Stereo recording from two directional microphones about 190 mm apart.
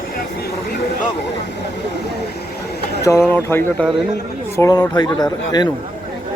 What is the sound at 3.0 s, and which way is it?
Speech, 15° left (ahead or behind).